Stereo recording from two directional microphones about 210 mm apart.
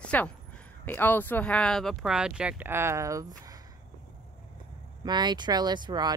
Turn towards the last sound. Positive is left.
turn(degrees=-20)  # may be behind; listen again after turning